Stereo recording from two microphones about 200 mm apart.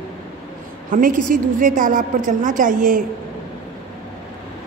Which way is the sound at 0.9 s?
40° right (ahead or behind).